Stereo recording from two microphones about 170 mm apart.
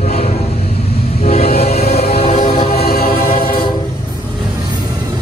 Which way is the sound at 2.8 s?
65° left (ahead or behind).